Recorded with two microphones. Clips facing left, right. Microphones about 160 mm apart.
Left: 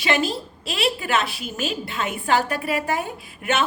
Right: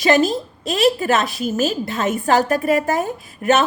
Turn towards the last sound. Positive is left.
turn(degrees=-40)  # may be behind; listen again after turning